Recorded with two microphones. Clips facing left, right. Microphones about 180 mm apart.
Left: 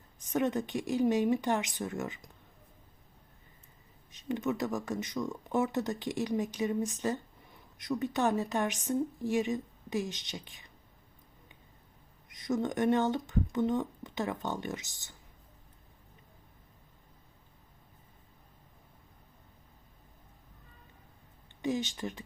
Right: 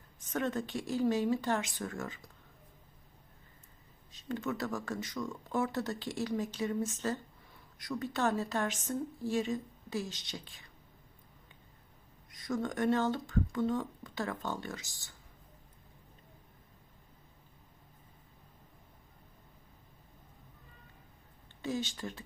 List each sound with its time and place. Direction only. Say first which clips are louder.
0.2 s speech: left 4 dB; 15° left (ahead or behind)
4.1 s speech: left 4 dB; 20° left (ahead or behind)
12.3 s speech: left 3 dB; 20° left (ahead or behind)
21.6 s speech: left 4 dB; 20° left (ahead or behind)